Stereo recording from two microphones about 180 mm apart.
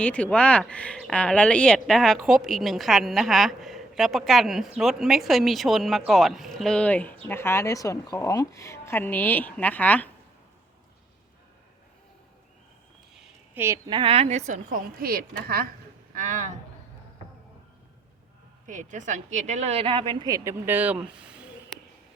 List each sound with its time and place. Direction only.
0.0 s a woman's voice: 5° left (ahead or behind)
13.1 s a sound: 10° right (ahead or behind)
13.9 s a woman's voice: 30° right (ahead or behind); by 15.6 s 55° right (ahead or behind)
16.1 s a woman's voice: 45° right (ahead or behind)
18.6 s speech: 45° right (ahead or behind); by 21.5 s 5° right (ahead or behind)